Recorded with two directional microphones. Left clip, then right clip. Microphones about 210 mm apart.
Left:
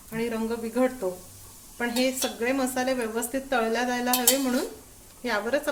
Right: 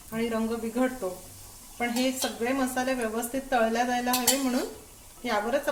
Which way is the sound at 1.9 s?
25° left (ahead or behind).